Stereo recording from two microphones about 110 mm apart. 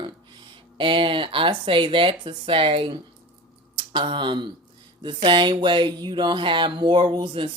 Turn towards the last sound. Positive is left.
turn(degrees=-50)  # may be behind; listen again after turning